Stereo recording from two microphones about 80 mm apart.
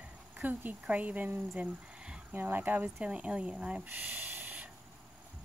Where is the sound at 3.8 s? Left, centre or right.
Right.